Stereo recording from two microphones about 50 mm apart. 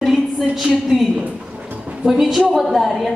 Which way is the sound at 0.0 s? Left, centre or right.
Centre.